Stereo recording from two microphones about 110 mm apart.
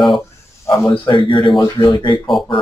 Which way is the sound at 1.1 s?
50° left (ahead or behind).